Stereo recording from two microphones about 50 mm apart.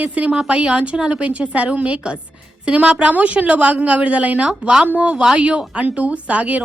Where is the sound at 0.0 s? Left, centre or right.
Right.